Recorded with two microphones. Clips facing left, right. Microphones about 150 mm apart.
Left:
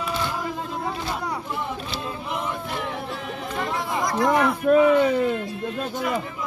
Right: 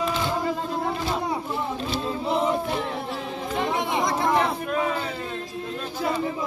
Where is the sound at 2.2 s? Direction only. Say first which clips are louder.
Right 8 dB; 35° right (ahead or behind).